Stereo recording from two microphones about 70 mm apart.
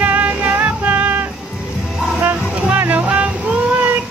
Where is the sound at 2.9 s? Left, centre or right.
Right.